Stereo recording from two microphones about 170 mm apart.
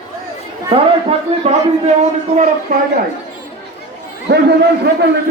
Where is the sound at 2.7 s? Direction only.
55° right (ahead or behind).